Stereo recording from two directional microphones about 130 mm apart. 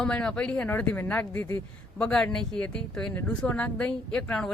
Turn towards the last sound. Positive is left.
turn(degrees=10)  # may be behind; listen again after turning